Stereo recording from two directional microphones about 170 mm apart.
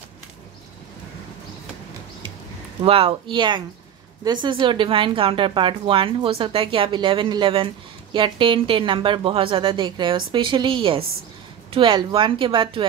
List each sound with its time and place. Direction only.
2.8 s speech: 35° right (ahead or behind)